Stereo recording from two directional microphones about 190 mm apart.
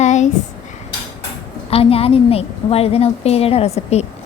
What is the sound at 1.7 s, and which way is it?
A woman's voice, 30° left (ahead or behind).